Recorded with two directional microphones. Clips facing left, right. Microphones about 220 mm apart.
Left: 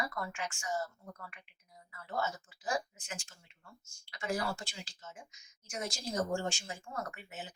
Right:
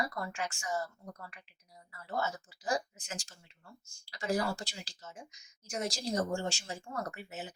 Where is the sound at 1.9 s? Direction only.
35° right (ahead or behind).